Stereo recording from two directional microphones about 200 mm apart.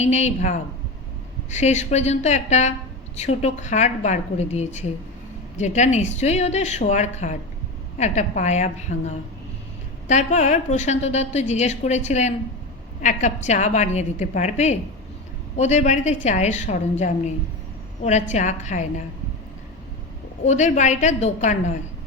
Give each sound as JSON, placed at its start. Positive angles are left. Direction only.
{"t": 0.0, "sound": "a woman's voice", "side_deg": 35}
{"t": 20.4, "sound": "a woman's voice", "side_deg": 35}